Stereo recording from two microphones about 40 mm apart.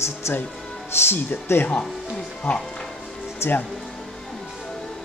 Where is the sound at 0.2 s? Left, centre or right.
Left.